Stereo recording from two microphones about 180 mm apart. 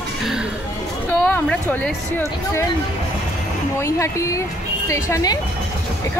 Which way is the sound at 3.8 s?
15° left (ahead or behind).